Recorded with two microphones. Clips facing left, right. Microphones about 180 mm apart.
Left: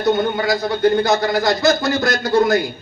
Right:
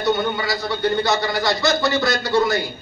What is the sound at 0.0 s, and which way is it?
A man's voice, 50° left (ahead or behind).